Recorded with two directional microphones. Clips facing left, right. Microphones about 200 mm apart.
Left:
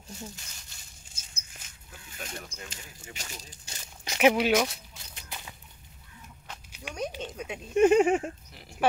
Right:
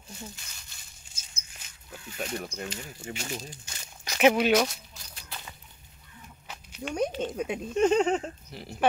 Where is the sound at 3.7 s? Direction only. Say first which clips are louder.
Even; 35° left (ahead or behind).